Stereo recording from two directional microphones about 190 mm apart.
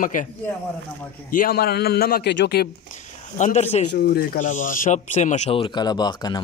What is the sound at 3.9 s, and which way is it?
Speech, 55° left (ahead or behind).